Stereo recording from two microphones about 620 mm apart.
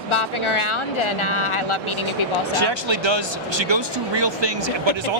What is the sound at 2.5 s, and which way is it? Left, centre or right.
Speech, right.